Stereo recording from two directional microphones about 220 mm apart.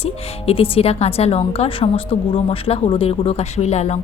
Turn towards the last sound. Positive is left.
turn(degrees=30)  # may be behind; listen again after turning